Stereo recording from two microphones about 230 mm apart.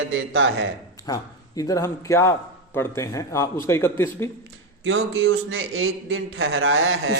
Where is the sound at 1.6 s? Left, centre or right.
Centre.